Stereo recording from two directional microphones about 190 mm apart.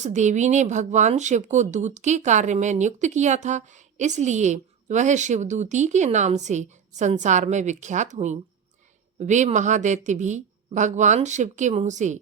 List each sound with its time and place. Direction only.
0.0 s speech: 40° right (ahead or behind)